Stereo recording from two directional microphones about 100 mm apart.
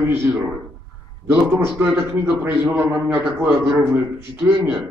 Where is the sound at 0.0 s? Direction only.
20° right (ahead or behind).